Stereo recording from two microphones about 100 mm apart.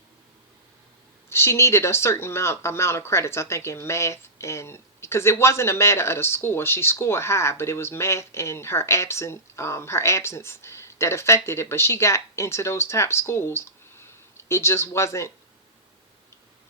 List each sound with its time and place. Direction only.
1.3 s speech: 25° left (ahead or behind)